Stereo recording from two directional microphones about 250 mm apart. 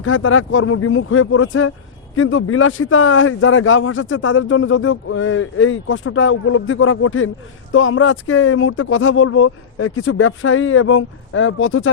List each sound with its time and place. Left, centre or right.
0.0 s a man's voice: left